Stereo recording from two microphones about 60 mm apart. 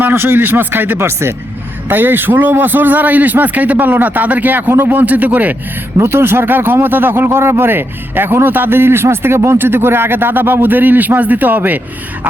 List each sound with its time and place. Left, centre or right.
0.0 s a man's voice: right
6.0 s speech: right